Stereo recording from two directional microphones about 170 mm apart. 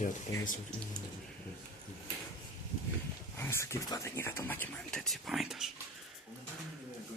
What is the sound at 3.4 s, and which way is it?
Speech, 15° left (ahead or behind).